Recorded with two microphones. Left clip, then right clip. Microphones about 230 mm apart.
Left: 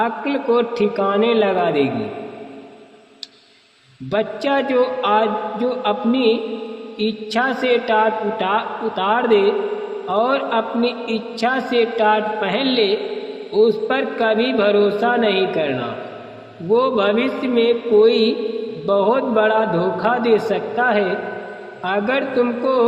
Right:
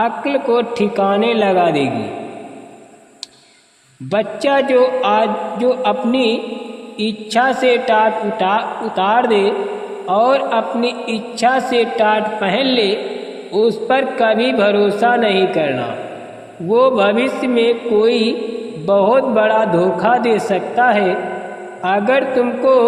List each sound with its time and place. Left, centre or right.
0.0 s a man's voice: right
4.1 s a man's voice: right